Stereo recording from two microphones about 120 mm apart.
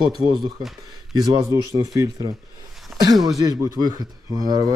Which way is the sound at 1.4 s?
25° right (ahead or behind).